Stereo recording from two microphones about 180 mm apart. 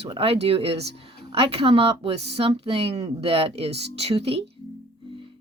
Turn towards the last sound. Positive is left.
turn(degrees=-35)  # may be behind; listen again after turning